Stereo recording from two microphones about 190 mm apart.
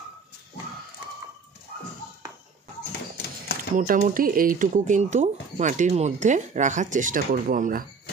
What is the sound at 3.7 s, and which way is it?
Speech, 45° right (ahead or behind).